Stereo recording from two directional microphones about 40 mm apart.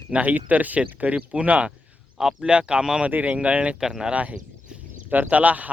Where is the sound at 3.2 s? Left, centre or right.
Right.